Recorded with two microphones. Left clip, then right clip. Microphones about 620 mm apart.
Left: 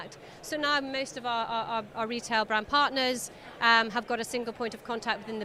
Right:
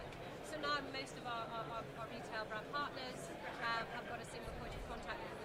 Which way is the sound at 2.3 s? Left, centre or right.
Left.